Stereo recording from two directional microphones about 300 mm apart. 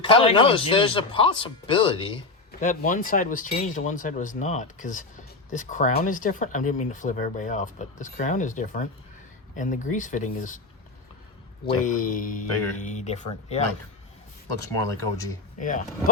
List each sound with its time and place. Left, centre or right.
0.0 s speech: centre
11.7 s speech: left
14.6 s speech: centre
15.5 s speech: left